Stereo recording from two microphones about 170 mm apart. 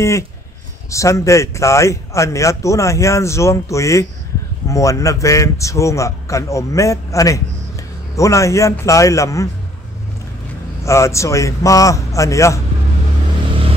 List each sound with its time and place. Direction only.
0.8 s a man's voice: 20° left (ahead or behind)
10.8 s a man's voice: 15° left (ahead or behind)